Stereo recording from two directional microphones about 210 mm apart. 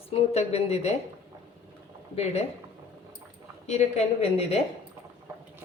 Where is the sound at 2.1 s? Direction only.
30° left (ahead or behind).